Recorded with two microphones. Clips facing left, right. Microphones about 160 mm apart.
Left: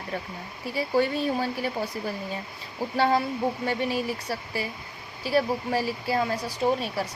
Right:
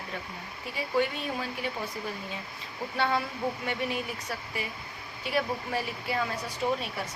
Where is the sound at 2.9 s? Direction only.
35° left (ahead or behind).